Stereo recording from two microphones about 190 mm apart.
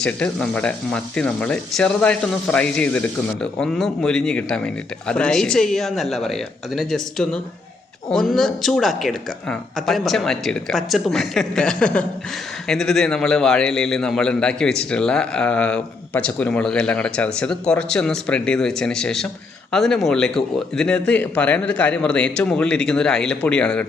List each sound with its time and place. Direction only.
0.0 s a man's voice: 5° left (ahead or behind)